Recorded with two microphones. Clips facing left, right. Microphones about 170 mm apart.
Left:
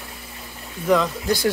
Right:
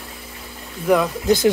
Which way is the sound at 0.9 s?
15° right (ahead or behind).